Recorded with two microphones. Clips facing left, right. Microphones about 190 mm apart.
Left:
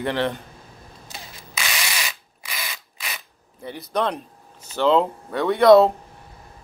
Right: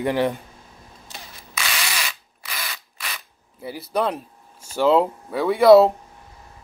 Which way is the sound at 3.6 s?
5° right (ahead or behind).